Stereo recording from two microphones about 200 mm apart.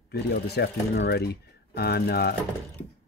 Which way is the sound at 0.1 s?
55° left (ahead or behind).